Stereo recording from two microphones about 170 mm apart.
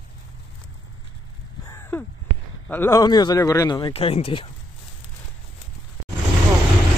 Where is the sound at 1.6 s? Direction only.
15° left (ahead or behind).